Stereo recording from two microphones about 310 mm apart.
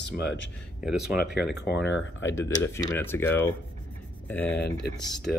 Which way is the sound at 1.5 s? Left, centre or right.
Left.